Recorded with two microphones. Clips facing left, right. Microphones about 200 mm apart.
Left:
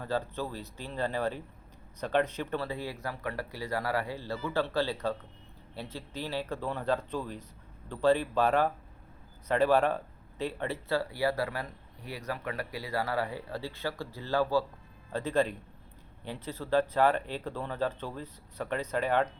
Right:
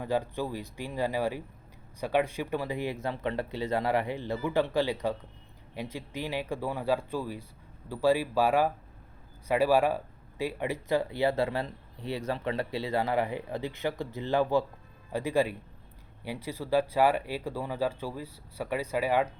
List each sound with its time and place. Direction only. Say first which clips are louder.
0.0 s speech: right 3 dB; 15° right (ahead or behind)